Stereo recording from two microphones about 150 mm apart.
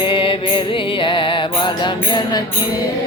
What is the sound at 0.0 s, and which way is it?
Music, 35° left (ahead or behind).